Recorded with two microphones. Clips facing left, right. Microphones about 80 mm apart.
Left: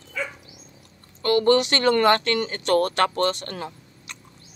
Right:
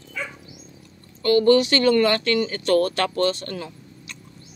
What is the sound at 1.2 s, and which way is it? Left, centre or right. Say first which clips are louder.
Speech: right 2 dB; left.